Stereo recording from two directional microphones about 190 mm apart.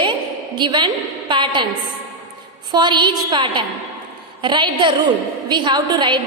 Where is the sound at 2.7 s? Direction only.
25° right (ahead or behind).